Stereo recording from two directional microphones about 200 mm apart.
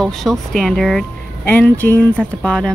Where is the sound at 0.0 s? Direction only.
Centre (ahead or behind).